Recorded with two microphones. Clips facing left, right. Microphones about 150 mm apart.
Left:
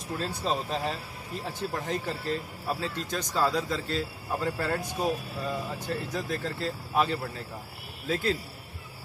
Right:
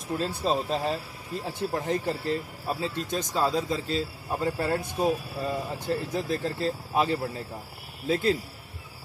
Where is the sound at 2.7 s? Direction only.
20° right (ahead or behind).